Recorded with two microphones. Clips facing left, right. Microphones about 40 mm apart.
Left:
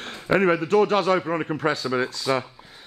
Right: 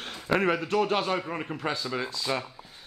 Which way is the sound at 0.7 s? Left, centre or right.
Left.